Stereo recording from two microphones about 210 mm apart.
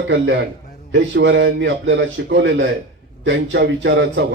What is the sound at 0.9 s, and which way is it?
A man's voice, 60° right (ahead or behind).